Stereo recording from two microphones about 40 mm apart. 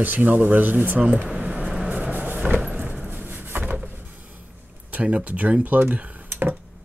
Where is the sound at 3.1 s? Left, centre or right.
Right.